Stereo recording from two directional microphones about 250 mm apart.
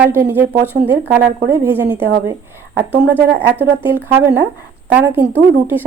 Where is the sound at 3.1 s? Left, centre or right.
Centre.